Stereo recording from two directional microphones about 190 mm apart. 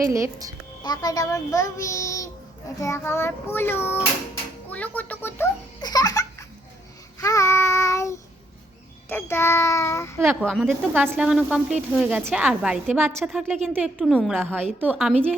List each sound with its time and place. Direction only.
0.0 s a woman's voice: 15° right (ahead or behind)
0.8 s child singing: 20° left (ahead or behind)
5.8 s laughter: 20° left (ahead or behind)
7.2 s child singing: 15° left (ahead or behind)
10.2 s a woman's voice: centre (ahead or behind)